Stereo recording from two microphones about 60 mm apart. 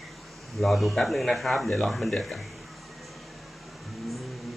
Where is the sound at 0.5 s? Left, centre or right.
Centre.